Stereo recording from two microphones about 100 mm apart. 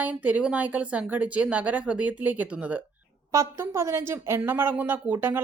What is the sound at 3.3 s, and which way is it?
A woman's voice, 30° right (ahead or behind).